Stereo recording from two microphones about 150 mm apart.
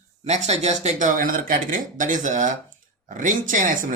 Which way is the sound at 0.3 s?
50° right (ahead or behind).